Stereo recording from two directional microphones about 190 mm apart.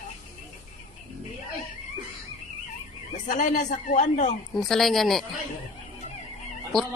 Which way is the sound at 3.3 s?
45° left (ahead or behind).